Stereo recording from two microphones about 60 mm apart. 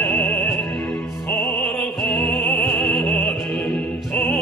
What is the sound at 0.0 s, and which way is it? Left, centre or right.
Music, left.